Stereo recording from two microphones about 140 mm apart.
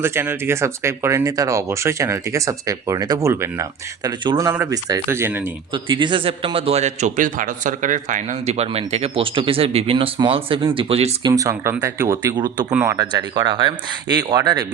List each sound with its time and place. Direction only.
0.0 s speech: 15° right (ahead or behind)
5.7 s a man's voice: 35° right (ahead or behind)
11.2 s speech: 25° right (ahead or behind)
12.7 s speech: 15° right (ahead or behind)
13.0 s speech: 30° right (ahead or behind)